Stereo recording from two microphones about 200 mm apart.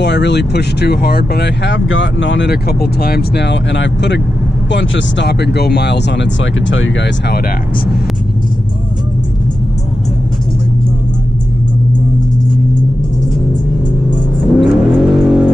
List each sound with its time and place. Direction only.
0.0 s speech: 60° left (ahead or behind)
14.1 s car: centre (ahead or behind)